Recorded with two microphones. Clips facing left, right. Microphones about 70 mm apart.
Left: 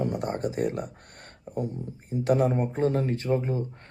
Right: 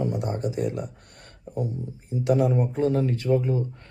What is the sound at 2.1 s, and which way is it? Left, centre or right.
Speech, left.